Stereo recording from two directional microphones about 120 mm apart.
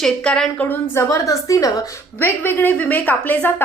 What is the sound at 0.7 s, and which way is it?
A woman's voice, 20° left (ahead or behind).